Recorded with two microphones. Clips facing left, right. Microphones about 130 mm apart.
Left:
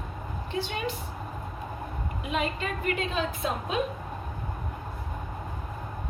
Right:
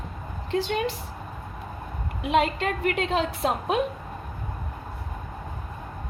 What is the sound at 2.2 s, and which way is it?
A woman's voice, 80° right.